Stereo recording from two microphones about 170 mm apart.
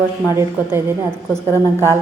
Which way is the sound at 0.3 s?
15° right (ahead or behind).